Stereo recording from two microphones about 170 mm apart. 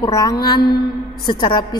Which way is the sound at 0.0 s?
20° left (ahead or behind).